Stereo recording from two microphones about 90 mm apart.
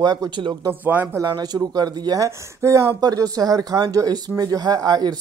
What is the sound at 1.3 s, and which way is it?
Speech, 45° right (ahead or behind).